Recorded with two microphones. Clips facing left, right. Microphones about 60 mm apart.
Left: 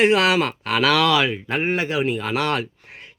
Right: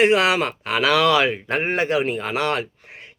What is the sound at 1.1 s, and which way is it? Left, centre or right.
Speech, right.